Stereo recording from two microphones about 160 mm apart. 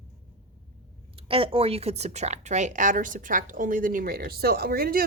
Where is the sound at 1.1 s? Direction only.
35° right (ahead or behind).